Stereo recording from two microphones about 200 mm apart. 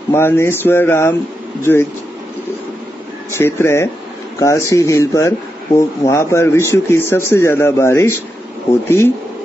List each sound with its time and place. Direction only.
0.1 s speech: 10° left (ahead or behind)
3.3 s speech: 10° left (ahead or behind)